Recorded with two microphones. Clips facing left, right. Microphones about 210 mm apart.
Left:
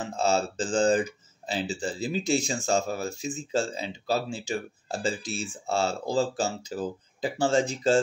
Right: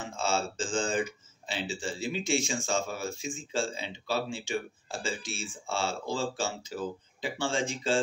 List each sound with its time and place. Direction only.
0.0 s speech: 40° left (ahead or behind)